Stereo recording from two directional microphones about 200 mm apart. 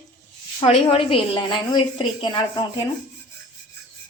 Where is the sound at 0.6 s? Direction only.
25° left (ahead or behind).